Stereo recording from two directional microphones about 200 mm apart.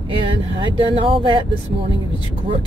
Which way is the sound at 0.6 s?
25° right (ahead or behind).